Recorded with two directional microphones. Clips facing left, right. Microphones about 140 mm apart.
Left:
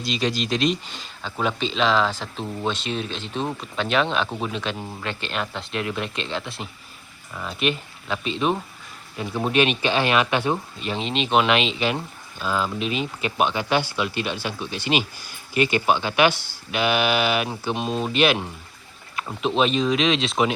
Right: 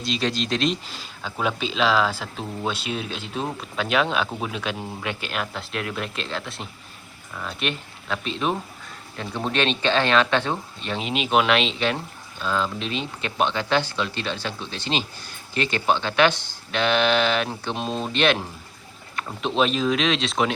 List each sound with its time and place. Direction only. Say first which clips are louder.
0.0 s speech: left 1 dB; centre (ahead or behind)
11.0 s speech: left 1 dB; 5° right (ahead or behind)